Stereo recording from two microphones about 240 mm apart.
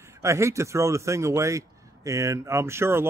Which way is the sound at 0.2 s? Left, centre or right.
Centre.